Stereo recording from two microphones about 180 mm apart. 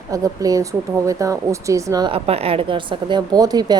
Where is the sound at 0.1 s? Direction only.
20° right (ahead or behind).